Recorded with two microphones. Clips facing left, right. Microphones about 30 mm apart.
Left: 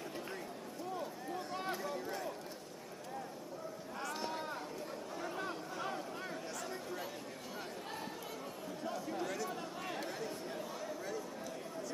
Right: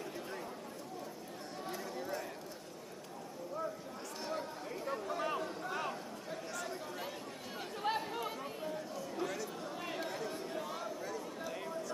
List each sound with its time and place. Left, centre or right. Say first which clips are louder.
4.2 s chatter: right 4 dB; centre
5.1 s chatter: right 6 dB; right
7.8 s chatter: right 8 dB; right
9.1 s chatter: right 3 dB; centre